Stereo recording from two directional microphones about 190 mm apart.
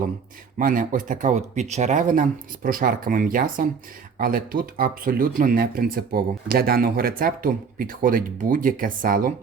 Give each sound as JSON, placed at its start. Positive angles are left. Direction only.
{"t": 0.6, "sound": "speech", "side_deg": -45}